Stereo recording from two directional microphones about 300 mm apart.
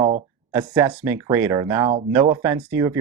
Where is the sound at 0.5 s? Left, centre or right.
Centre.